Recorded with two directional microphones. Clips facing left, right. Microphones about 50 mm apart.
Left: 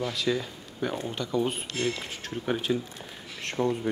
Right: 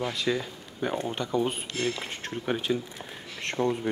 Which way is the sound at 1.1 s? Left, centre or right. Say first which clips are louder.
Left 1 dB; right.